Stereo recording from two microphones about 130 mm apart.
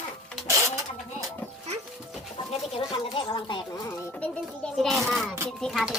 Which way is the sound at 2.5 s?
45° left (ahead or behind).